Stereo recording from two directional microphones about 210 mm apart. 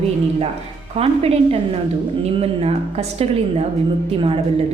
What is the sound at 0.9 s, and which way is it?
Speech, 30° right (ahead or behind).